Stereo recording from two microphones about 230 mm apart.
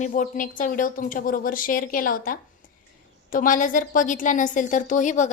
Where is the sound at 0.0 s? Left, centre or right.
Left.